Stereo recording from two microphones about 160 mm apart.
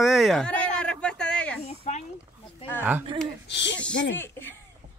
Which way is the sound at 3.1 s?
30° right (ahead or behind).